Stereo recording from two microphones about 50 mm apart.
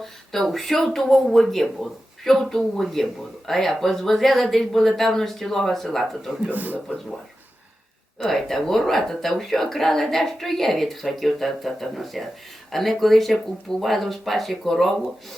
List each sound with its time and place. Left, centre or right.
0.0 s speech: centre
6.5 s a man's voice: right
8.3 s speech: centre